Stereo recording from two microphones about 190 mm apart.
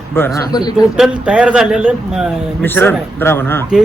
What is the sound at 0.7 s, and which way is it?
A man's voice, 5° right (ahead or behind).